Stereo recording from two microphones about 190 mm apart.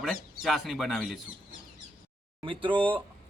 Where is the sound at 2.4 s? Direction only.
25° right (ahead or behind).